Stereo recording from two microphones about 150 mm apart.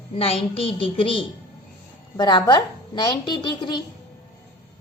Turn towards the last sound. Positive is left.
turn(degrees=30)  # may be behind; listen again after turning